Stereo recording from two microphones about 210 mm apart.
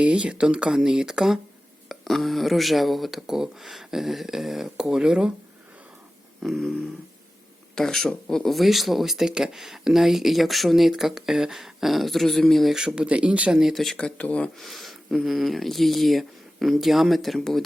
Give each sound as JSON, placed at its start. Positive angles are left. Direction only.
{"t": 0.0, "sound": "speech", "side_deg": -5}
{"t": 6.4, "sound": "speech", "side_deg": 0}